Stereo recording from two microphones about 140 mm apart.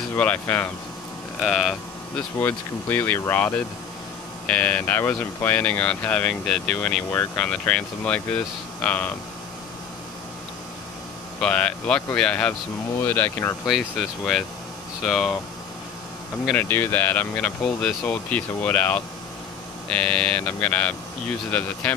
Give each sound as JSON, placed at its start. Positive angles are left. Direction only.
{"t": 0.1, "sound": "speech", "side_deg": 10}
{"t": 1.4, "sound": "speech", "side_deg": 0}
{"t": 2.4, "sound": "speech", "side_deg": 15}
{"t": 11.3, "sound": "speech", "side_deg": 5}
{"t": 13.7, "sound": "speech", "side_deg": 0}
{"t": 16.5, "sound": "speech", "side_deg": 15}